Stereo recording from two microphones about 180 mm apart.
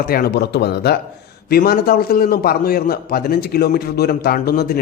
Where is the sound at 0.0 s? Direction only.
55° left (ahead or behind).